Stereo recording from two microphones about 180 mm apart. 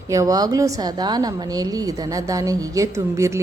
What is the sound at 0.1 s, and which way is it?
A woman's voice, 20° right (ahead or behind).